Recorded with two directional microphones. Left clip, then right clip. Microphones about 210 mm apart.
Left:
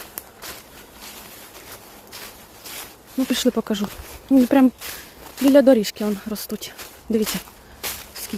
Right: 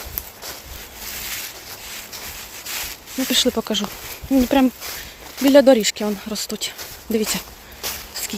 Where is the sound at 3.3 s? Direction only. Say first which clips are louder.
Right 4 dB; 30° left (ahead or behind).